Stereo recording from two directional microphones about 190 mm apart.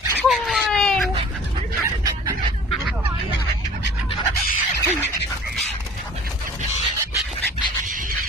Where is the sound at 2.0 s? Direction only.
20° right (ahead or behind).